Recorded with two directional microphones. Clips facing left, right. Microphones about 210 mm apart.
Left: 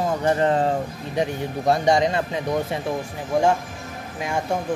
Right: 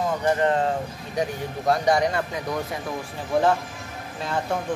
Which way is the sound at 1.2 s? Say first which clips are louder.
Left 3 dB; 25° left (ahead or behind).